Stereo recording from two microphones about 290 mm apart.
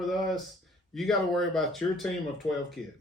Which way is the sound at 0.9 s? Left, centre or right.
Centre.